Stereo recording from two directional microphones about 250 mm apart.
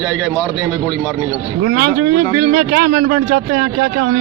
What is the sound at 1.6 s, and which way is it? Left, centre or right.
Speech, right.